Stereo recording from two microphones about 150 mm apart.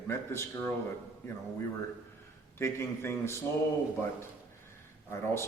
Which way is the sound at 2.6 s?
15° left (ahead or behind).